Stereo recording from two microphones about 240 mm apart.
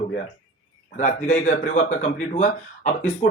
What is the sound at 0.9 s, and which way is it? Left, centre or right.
Speech, left.